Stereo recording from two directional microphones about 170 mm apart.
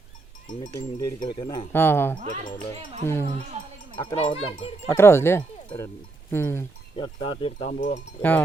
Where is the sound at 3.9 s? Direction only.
30° left (ahead or behind).